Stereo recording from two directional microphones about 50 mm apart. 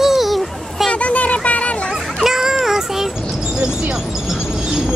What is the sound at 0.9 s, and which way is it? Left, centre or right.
Speech, left.